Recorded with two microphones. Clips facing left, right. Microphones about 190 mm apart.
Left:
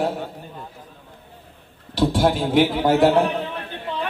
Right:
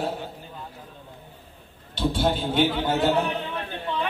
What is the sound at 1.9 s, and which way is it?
A man's voice, 85° left.